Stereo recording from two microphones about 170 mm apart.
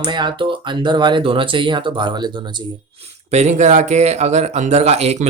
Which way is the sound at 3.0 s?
40° right (ahead or behind).